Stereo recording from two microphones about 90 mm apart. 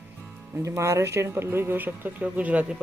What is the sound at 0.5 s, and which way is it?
Speech, 35° right (ahead or behind).